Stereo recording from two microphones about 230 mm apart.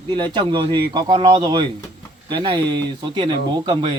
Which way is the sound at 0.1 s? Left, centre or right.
Centre.